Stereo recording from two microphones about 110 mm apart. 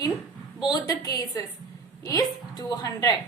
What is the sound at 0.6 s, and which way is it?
A woman's voice, 40° left (ahead or behind).